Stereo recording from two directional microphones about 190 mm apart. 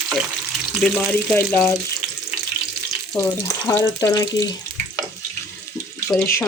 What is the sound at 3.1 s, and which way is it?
Speech, 15° left (ahead or behind).